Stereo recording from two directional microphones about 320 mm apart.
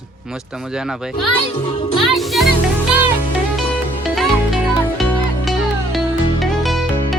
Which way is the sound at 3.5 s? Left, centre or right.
Centre.